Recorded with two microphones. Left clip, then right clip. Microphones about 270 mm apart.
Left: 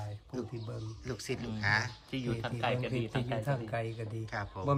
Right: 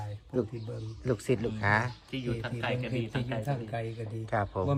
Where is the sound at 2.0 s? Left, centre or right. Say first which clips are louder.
Right 1 dB; left.